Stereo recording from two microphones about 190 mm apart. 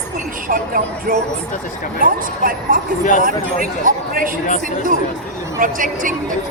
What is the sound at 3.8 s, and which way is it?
Speech, 45° right (ahead or behind).